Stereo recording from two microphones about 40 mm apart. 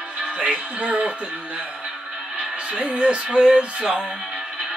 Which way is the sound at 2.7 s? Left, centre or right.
Right.